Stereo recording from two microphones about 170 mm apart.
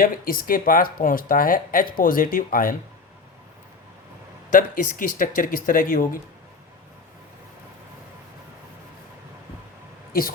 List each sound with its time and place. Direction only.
0.0 s speech: 60° left (ahead or behind)
4.5 s speech: 50° left (ahead or behind)
10.1 s a woman's voice: 60° left (ahead or behind)